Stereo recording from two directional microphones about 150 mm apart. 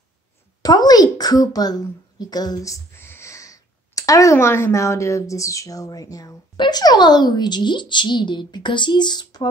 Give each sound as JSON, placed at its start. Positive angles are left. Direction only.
{"t": 0.6, "sound": "speech", "side_deg": 25}